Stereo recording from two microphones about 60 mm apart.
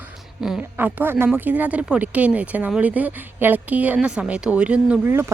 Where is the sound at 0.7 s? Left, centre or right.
Right.